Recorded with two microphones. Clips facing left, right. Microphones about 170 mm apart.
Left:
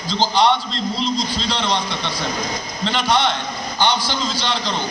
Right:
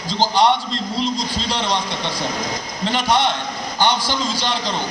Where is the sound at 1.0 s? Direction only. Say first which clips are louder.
Right 1 dB; 45° right (ahead or behind).